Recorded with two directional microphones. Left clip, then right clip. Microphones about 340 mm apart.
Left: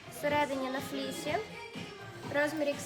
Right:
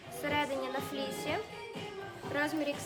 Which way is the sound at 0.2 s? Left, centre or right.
Centre.